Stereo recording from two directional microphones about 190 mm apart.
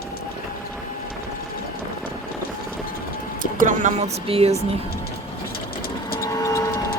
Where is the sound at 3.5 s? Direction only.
45° right (ahead or behind).